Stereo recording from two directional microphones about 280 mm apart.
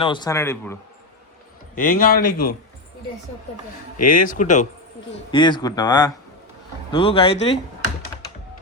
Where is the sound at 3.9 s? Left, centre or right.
Left.